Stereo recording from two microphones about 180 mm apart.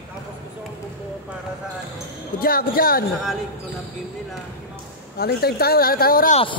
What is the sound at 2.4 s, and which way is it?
Speech, 55° left (ahead or behind).